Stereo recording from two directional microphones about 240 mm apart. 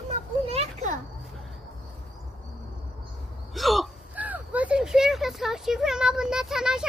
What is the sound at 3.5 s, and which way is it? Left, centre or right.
Hiccup, centre.